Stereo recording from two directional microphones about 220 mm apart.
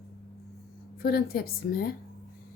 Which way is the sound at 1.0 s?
45° left (ahead or behind).